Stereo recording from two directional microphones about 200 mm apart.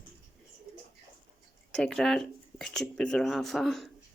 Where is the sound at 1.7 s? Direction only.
5° left (ahead or behind).